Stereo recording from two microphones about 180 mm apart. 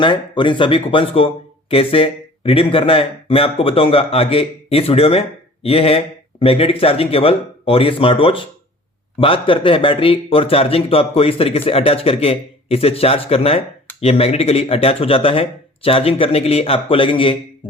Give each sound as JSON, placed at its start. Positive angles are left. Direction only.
{"t": 0.0, "sound": "a man's voice", "side_deg": 25}